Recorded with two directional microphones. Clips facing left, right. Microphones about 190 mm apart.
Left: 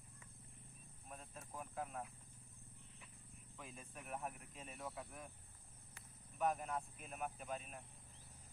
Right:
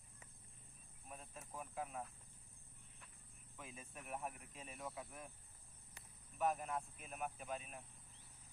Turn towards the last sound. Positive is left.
turn(degrees=0)  # may be behind; listen again after turning